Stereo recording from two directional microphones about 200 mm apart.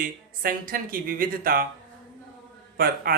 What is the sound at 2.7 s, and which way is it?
Speech, 50° right (ahead or behind).